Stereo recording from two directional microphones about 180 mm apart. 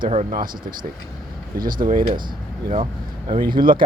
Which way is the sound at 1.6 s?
50° right (ahead or behind).